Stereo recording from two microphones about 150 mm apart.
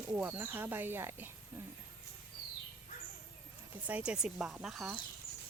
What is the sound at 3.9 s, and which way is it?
Speech, 5° right (ahead or behind).